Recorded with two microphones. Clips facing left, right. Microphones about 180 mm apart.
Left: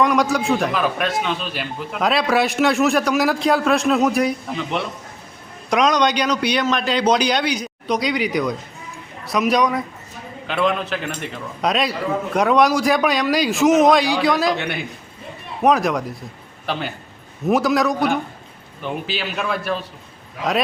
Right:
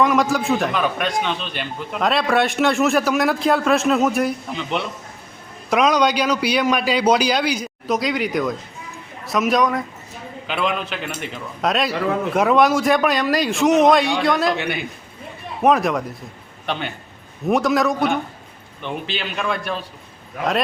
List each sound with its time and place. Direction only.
0.0 s a man's voice: centre (ahead or behind)